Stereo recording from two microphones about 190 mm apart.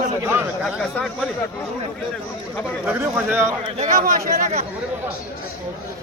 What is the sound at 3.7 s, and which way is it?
Speech, 40° right (ahead or behind).